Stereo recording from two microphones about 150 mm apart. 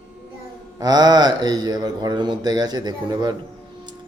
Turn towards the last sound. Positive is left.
turn(degrees=-30)  # may be behind; listen again after turning